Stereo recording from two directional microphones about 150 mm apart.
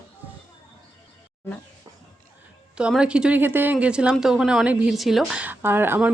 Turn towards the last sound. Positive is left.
turn(degrees=-15)  # may be behind; listen again after turning